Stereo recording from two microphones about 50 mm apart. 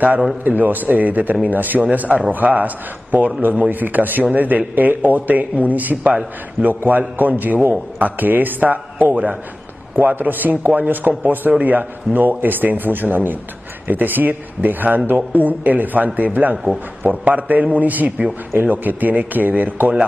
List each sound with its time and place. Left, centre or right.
0.4 s speech: right